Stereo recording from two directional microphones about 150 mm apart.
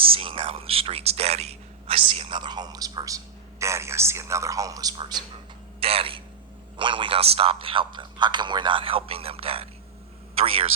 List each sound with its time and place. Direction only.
0.0 s a man's voice: 40° right (ahead or behind)
5.8 s speech: 40° right (ahead or behind)